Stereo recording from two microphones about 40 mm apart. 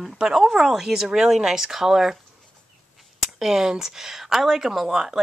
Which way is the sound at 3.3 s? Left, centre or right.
Centre.